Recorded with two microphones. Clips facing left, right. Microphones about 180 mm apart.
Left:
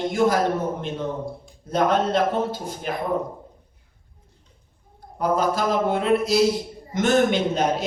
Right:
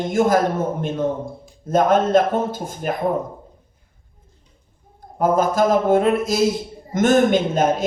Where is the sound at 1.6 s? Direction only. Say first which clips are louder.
Right 4 dB; 50° right (ahead or behind).